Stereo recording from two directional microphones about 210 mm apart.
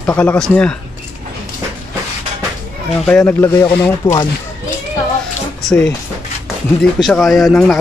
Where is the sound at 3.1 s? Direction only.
10° left (ahead or behind).